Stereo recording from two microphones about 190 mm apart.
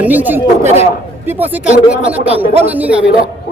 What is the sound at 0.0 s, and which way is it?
Speech, 10° right (ahead or behind).